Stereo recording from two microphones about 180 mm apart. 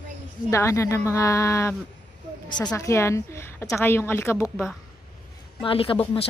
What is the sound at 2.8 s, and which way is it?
Speech, 15° left (ahead or behind).